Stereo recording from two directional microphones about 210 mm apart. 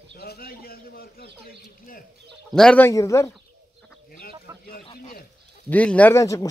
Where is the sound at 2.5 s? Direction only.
5° left (ahead or behind).